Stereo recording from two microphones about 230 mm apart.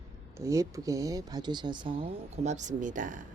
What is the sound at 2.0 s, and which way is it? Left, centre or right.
Speech, right.